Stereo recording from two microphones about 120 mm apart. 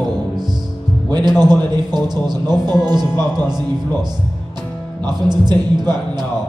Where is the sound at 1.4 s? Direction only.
35° right (ahead or behind).